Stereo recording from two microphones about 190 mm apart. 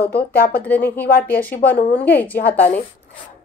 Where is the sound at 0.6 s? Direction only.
10° left (ahead or behind).